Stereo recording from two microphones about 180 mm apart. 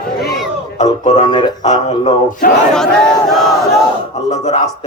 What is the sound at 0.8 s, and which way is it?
A man's voice, 40° left (ahead or behind).